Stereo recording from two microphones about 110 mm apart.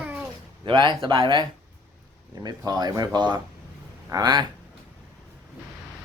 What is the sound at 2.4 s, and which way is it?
Speech, 40° right (ahead or behind).